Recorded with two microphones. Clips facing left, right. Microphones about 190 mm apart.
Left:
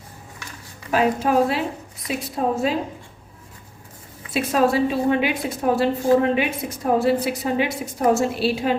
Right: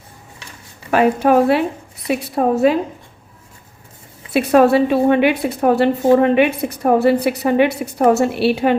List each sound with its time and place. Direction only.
0.9 s a woman's voice: 65° right (ahead or behind)
4.3 s a woman's voice: 65° right (ahead or behind)